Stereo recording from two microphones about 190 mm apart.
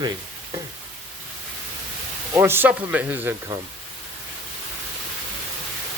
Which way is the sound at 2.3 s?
10° right (ahead or behind).